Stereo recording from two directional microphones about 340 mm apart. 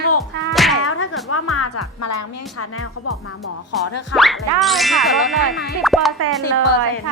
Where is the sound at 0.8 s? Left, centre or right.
Left.